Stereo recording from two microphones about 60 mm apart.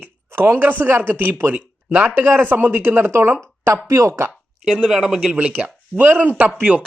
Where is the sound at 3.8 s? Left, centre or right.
Right.